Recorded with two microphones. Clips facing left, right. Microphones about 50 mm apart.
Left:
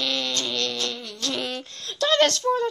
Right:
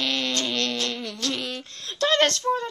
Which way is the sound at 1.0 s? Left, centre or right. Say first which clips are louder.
Right 2 dB; right.